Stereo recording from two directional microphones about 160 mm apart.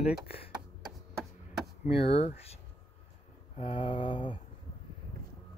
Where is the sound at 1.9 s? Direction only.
35° left (ahead or behind).